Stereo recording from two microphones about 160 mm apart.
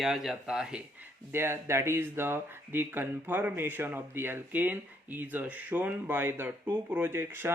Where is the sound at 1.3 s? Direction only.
15° right (ahead or behind).